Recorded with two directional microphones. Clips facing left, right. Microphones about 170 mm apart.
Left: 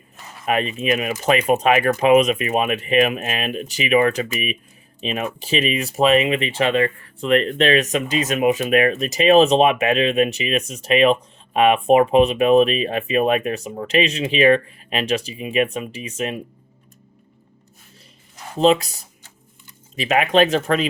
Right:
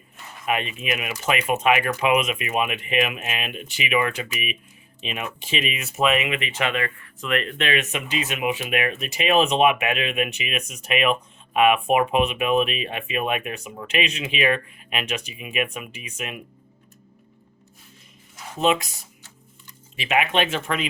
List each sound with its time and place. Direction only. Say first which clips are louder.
0.4 s speech: left 5 dB; 40° left (ahead or behind)
18.5 s speech: left 6 dB; 35° left (ahead or behind)
20.0 s speech: left 6 dB; 40° left (ahead or behind)